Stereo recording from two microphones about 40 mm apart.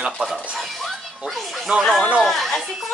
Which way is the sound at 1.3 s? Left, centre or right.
Centre.